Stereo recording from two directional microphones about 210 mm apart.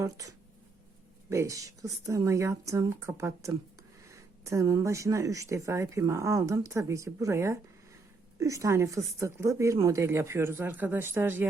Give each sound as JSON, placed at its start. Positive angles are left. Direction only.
{"t": 0.0, "sound": "speech", "side_deg": -15}